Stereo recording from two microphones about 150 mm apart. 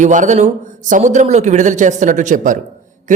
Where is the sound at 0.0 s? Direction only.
55° right (ahead or behind).